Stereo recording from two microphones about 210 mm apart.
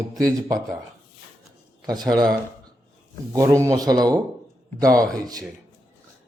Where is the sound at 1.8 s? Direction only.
20° right (ahead or behind).